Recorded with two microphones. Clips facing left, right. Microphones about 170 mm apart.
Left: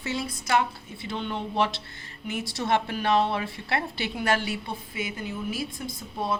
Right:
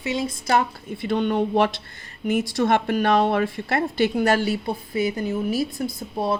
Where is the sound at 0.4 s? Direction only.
45° right (ahead or behind).